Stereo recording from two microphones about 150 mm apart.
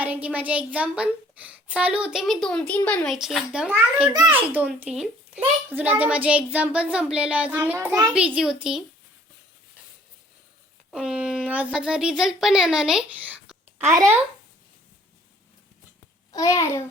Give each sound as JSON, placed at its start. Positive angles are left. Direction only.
{"t": 0.0, "sound": "a woman's voice", "side_deg": -10}
{"t": 10.9, "sound": "a child's voice", "side_deg": -5}
{"t": 16.3, "sound": "a child's voice", "side_deg": 20}